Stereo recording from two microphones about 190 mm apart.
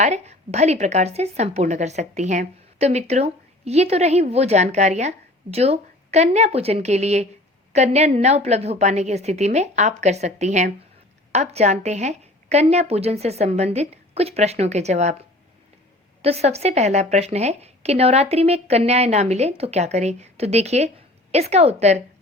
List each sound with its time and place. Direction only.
0.0 s speech: 35° right (ahead or behind)
16.2 s speech: 35° right (ahead or behind)